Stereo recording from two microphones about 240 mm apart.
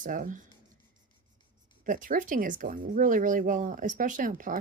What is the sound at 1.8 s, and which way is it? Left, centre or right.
Speech, right.